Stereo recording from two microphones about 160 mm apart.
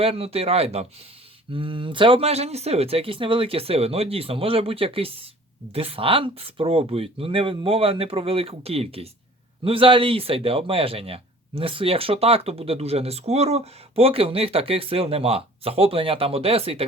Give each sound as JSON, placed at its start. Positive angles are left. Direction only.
{"t": 0.0, "sound": "speech", "side_deg": -35}